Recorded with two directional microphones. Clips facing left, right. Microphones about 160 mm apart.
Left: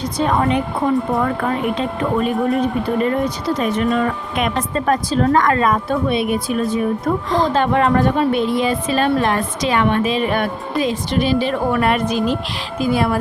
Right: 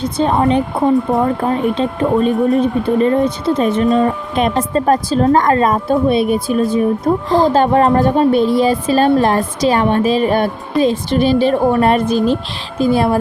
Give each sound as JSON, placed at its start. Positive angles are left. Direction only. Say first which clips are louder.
{"t": 0.0, "sound": "speech", "louder": "right 3 dB", "side_deg": -25}